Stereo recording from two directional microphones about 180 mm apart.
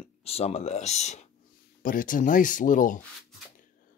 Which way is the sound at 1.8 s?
50° left (ahead or behind).